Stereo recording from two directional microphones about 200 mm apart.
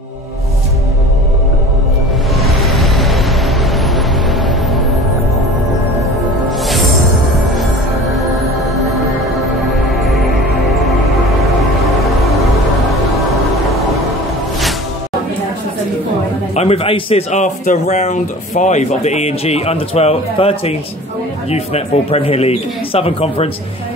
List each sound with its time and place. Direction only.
2.4 s a sound: centre (ahead or behind)
11.4 s music: centre (ahead or behind)
16.5 s a man's voice: 30° left (ahead or behind)